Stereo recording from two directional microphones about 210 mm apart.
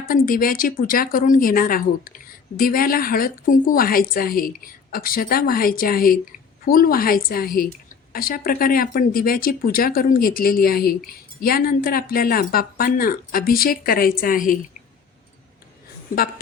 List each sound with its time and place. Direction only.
0.1 s a woman's voice: 45° left (ahead or behind)